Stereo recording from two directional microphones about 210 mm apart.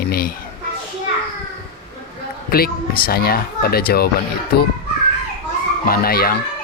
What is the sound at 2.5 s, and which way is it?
Speech, 45° left (ahead or behind).